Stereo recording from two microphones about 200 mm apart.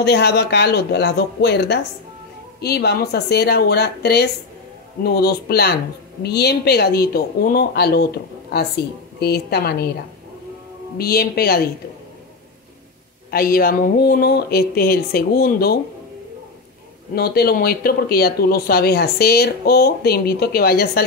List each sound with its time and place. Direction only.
0.0 s speech: 55° left (ahead or behind)
11.0 s speech: 50° left (ahead or behind)
13.3 s speech: 50° left (ahead or behind)
17.1 s speech: 50° left (ahead or behind)